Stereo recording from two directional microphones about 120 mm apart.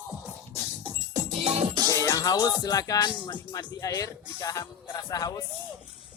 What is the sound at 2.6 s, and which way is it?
Speech, 30° left (ahead or behind).